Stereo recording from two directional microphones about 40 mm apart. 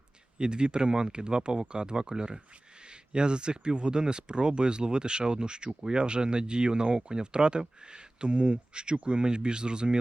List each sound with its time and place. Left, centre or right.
0.3 s speech: right